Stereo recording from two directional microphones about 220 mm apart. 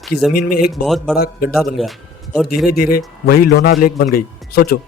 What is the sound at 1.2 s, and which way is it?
Speech, 40° left (ahead or behind).